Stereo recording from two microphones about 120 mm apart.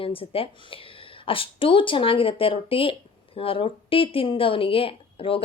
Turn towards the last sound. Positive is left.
turn(degrees=50)  # may be behind; listen again after turning